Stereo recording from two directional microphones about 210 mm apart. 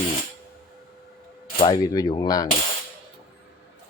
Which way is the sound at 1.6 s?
20° left (ahead or behind).